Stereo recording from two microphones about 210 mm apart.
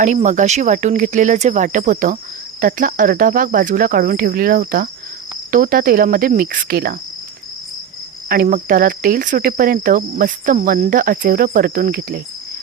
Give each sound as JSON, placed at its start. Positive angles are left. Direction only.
{"t": 0.0, "sound": "cricket", "side_deg": -35}
{"t": 8.3, "sound": "cricket", "side_deg": -40}